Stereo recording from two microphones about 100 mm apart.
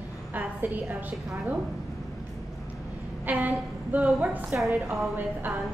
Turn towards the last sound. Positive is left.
turn(degrees=-20)  # may be behind; listen again after turning